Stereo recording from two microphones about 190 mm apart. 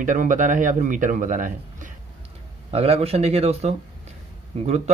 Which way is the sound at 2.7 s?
30° right (ahead or behind).